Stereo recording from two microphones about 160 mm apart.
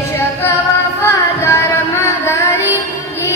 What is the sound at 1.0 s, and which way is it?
Music, 15° left (ahead or behind).